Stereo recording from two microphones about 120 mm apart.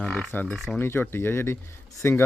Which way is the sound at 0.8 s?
20° left (ahead or behind).